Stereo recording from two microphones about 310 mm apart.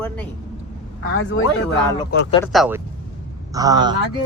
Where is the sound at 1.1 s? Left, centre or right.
Left.